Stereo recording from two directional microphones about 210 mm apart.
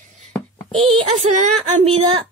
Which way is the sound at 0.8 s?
25° right (ahead or behind).